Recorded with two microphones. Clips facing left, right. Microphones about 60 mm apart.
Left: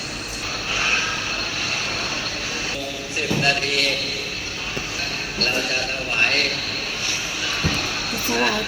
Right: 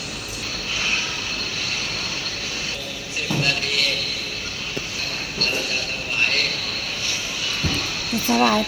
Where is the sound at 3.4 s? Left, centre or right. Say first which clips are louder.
Left 2 dB; left.